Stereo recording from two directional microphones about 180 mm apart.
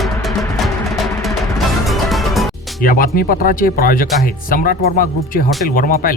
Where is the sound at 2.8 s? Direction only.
50° left (ahead or behind).